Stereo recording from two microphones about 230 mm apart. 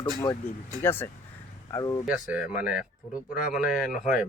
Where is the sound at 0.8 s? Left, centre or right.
Centre.